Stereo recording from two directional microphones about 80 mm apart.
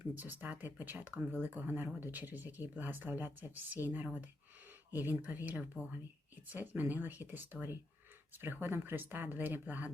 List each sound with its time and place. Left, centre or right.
0.0 s speech: right